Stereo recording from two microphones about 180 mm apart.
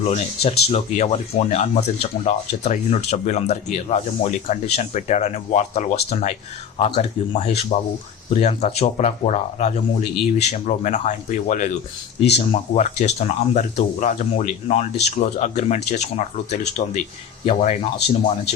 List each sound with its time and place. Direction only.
0.0 s speech: 40° left (ahead or behind)